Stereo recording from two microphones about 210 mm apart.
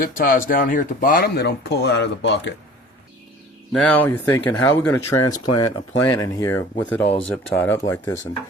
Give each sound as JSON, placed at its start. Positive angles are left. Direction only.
{"t": 0.2, "sound": "speech", "side_deg": 40}
{"t": 3.7, "sound": "speech", "side_deg": 5}